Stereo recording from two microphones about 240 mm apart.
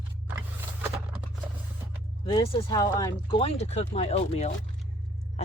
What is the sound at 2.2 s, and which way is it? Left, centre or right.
Speech, left.